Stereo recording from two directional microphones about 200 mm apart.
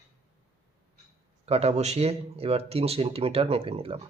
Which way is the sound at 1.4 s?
30° right (ahead or behind).